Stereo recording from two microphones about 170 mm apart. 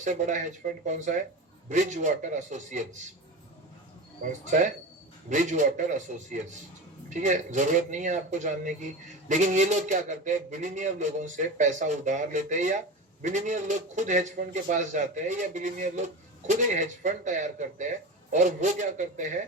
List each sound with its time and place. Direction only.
0.0 s a man's voice: 45° right (ahead or behind)
4.3 s a man's voice: 45° right (ahead or behind)